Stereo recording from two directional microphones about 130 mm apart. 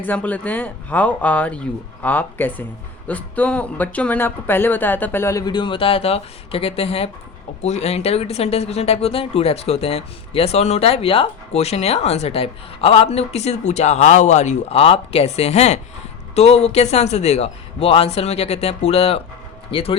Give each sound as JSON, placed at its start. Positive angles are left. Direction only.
{"t": 0.0, "sound": "speech", "side_deg": 10}